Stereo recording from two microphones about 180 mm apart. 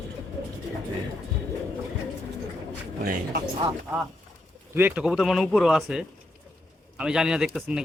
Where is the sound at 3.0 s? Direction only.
60° right (ahead or behind).